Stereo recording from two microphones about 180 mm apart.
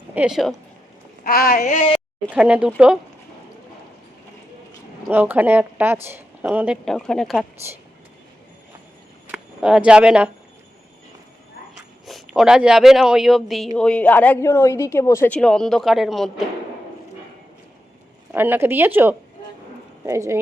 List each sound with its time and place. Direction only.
0.1 s speech: 5° right (ahead or behind)
1.2 s speech: 55° left (ahead or behind)
2.3 s a woman's voice: 5° right (ahead or behind)
5.0 s a woman's voice: 10° right (ahead or behind)
9.3 s speech: 5° right (ahead or behind)
12.0 s a woman's voice: centre (ahead or behind)
18.3 s a woman's voice: 10° right (ahead or behind)